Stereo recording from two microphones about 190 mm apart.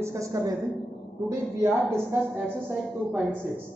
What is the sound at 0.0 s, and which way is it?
Speech, 15° right (ahead or behind).